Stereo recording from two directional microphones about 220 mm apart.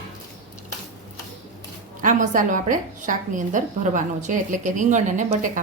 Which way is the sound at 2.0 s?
35° right (ahead or behind).